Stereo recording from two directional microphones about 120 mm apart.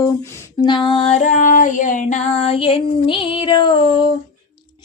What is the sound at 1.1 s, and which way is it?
Female singing, 90° left.